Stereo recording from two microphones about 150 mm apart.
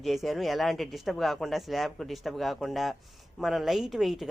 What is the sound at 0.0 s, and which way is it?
A woman's voice, centre (ahead or behind).